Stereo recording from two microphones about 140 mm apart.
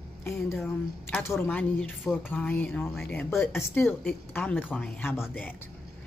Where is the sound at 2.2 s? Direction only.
15° left (ahead or behind).